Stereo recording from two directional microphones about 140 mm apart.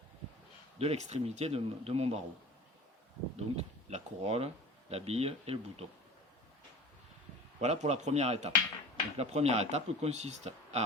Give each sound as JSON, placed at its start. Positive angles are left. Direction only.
{"t": 0.8, "sound": "speech", "side_deg": -50}
{"t": 3.3, "sound": "speech", "side_deg": -50}
{"t": 7.6, "sound": "speech", "side_deg": -55}